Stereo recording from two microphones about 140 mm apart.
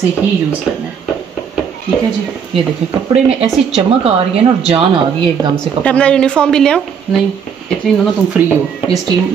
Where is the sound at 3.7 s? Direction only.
45° right (ahead or behind).